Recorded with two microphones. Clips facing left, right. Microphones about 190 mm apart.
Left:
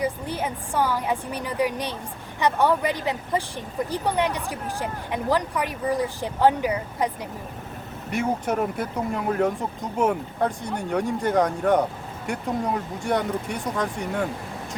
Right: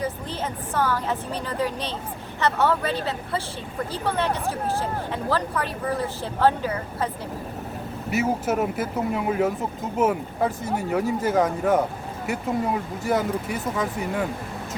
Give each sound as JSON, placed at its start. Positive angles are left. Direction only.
{"t": 0.0, "sound": "speech", "side_deg": 10}
{"t": 8.1, "sound": "speech", "side_deg": -5}